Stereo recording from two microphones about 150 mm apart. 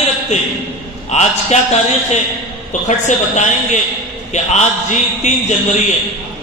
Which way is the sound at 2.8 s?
50° left (ahead or behind).